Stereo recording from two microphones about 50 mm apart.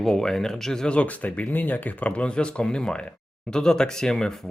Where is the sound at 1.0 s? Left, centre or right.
Left.